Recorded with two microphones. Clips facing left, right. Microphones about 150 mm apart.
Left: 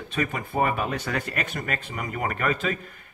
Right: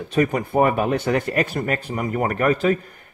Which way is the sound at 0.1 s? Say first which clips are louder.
Right 8 dB; 40° right (ahead or behind).